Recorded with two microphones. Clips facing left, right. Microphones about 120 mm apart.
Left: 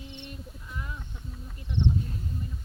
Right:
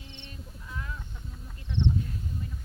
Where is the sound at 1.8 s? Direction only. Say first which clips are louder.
Left 1 dB; 10° left (ahead or behind).